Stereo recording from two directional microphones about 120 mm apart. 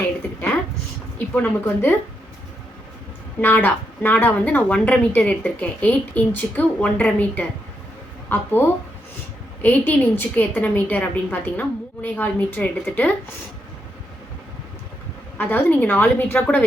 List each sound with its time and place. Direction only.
1.3 s a woman's voice: 15° left (ahead or behind)
3.4 s a woman's voice: 15° left (ahead or behind)
9.6 s a woman's voice: 15° left (ahead or behind)
15.4 s a woman's voice: 15° left (ahead or behind)